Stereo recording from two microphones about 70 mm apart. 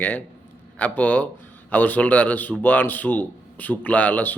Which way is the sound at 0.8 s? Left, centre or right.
Left.